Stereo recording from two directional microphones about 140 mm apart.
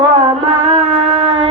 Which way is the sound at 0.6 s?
45° right (ahead or behind).